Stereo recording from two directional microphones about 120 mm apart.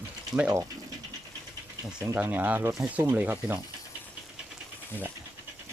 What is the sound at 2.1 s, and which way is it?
Speech, 15° right (ahead or behind).